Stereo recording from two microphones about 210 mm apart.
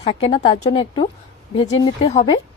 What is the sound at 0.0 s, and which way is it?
A woman's voice, 25° left (ahead or behind).